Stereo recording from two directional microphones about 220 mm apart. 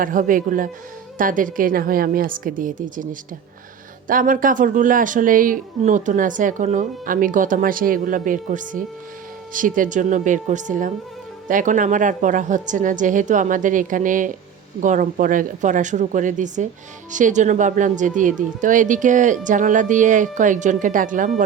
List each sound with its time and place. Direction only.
0.0 s speech: 40° right (ahead or behind)